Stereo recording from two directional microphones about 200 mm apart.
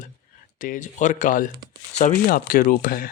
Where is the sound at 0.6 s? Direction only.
40° left (ahead or behind).